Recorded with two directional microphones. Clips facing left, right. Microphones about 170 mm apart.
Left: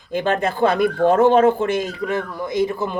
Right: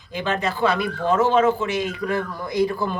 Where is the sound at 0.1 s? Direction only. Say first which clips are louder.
Left 4 dB; 50° left (ahead or behind).